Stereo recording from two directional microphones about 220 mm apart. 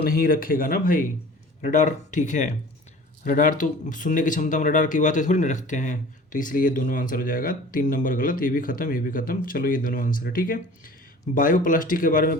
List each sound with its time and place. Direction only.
0.0 s speech: 40° left (ahead or behind)